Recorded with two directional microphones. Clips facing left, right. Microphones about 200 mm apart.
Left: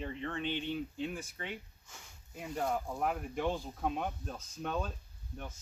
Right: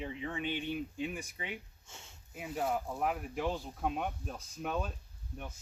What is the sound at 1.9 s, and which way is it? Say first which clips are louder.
Speech: right 2 dB; 25° right (ahead or behind).